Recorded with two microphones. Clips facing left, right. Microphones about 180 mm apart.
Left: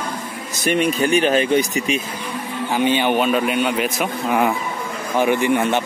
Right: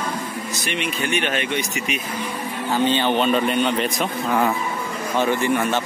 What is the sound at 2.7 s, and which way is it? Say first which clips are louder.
A man's voice: left 2 dB; 15° left (ahead or behind).